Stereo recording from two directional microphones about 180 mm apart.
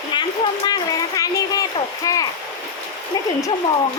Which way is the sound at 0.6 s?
20° left (ahead or behind).